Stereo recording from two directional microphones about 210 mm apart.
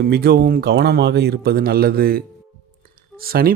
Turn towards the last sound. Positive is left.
turn(degrees=-45)  # may be behind; listen again after turning